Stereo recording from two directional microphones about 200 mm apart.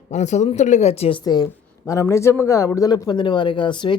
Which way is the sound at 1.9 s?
15° left (ahead or behind).